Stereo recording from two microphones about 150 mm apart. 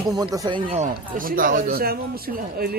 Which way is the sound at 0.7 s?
50° right (ahead or behind).